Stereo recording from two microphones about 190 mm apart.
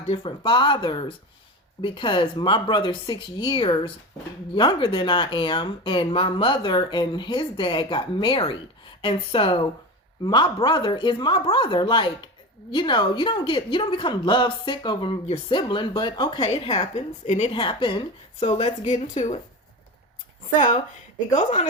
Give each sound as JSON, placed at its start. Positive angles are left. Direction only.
{"t": 0.1, "sound": "a woman's voice", "side_deg": 30}
{"t": 20.6, "sound": "a woman's voice", "side_deg": 40}